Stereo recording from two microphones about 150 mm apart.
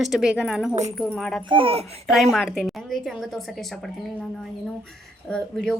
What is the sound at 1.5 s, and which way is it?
Speech, 40° right (ahead or behind).